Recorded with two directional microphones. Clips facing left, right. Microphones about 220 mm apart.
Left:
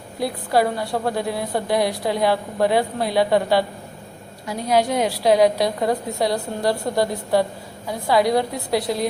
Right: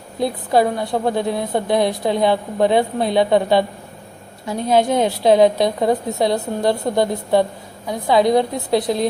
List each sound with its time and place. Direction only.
0.2 s a woman's voice: 20° right (ahead or behind)